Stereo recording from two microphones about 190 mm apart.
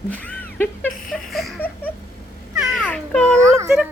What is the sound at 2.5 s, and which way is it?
Babbling, centre (ahead or behind).